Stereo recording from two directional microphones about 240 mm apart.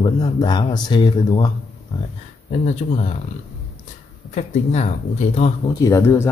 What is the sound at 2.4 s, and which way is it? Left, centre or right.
Speech, left.